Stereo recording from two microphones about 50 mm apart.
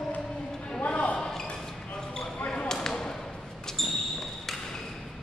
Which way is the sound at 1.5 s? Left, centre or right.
Centre.